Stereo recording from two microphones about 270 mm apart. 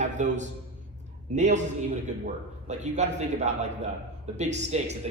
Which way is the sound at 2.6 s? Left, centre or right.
Right.